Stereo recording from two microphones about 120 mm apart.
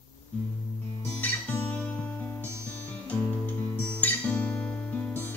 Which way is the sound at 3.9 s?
10° left (ahead or behind).